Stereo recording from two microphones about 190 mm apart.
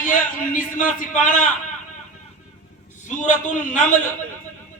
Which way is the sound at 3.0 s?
40° left (ahead or behind).